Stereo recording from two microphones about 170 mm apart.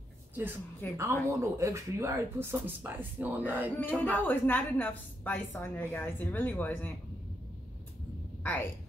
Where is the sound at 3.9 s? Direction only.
10° left (ahead or behind).